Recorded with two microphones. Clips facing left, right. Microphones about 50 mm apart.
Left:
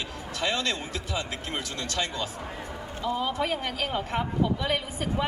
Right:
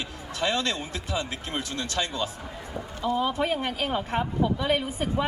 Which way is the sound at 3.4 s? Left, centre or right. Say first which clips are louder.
Right 2 dB; right.